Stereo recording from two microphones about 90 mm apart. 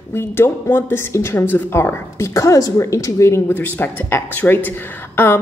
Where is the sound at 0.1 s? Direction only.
25° left (ahead or behind).